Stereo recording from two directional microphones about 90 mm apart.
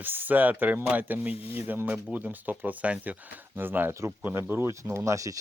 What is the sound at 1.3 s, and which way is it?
Speech, 90° left.